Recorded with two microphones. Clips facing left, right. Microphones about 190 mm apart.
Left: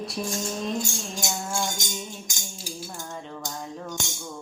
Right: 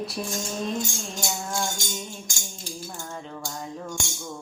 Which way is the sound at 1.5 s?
15° left (ahead or behind).